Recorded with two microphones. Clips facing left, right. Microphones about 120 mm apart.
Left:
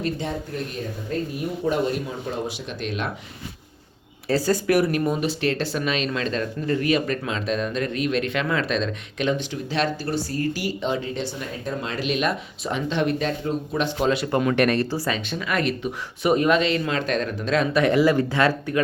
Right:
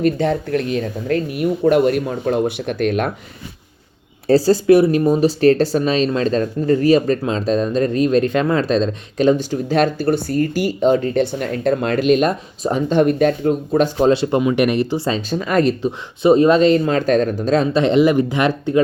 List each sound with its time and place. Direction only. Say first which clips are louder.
0.0 s speech: right 10 dB; 65° right (ahead or behind)
4.3 s speech: right 9 dB; 35° right (ahead or behind)
14.3 s speech: right 4 dB; 15° right (ahead or behind)
15.3 s speech: right 11 dB; 40° right (ahead or behind); by 18.8 s 20° right (ahead or behind)